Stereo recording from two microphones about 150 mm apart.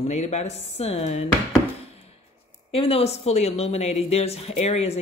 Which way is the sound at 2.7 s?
40° left (ahead or behind).